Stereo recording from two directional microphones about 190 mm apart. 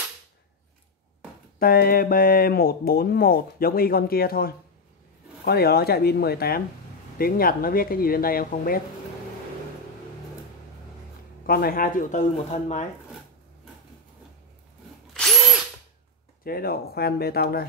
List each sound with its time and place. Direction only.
1.6 s speech: 50° left (ahead or behind)
11.4 s speech: 50° left (ahead or behind)
15.1 s drill: centre (ahead or behind)
16.4 s speech: 55° left (ahead or behind)